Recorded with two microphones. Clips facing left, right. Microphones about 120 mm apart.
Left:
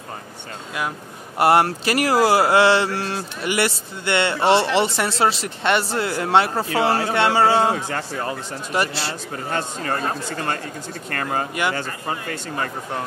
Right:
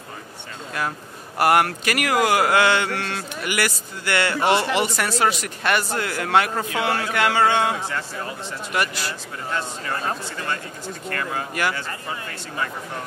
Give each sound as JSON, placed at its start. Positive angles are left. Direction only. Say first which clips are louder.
{"t": 1.4, "sound": "a man's voice", "louder": "left 2 dB", "side_deg": 30}
{"t": 7.7, "sound": "speech", "louder": "left 3 dB", "side_deg": 50}
{"t": 8.7, "sound": "speech", "louder": "left 2 dB", "side_deg": 30}
{"t": 9.5, "sound": "speech", "louder": "left 3 dB", "side_deg": 50}